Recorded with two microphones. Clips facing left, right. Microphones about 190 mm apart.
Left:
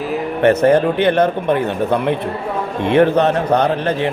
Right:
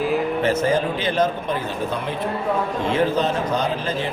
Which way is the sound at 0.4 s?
65° left (ahead or behind).